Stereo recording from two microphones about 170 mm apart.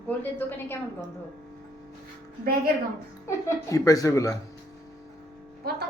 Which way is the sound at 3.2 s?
20° left (ahead or behind).